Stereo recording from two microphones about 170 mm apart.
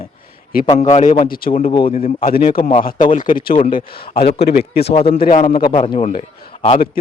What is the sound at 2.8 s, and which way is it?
Speech, 50° left (ahead or behind).